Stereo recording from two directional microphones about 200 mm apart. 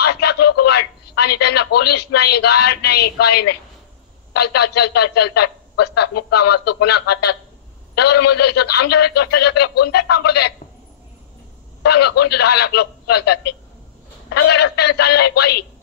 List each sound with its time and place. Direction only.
0.0 s speech: 55° left (ahead or behind)
4.6 s a man's voice: 55° left (ahead or behind)
11.8 s a man's voice: 55° left (ahead or behind)